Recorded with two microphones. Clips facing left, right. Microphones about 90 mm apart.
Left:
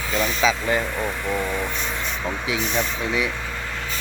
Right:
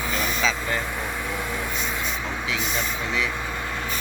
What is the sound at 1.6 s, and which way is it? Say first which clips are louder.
Vehicle: left 1 dB; 5° right (ahead or behind).